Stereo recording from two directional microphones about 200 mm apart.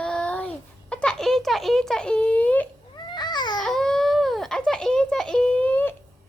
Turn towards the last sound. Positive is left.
turn(degrees=10)  # may be behind; listen again after turning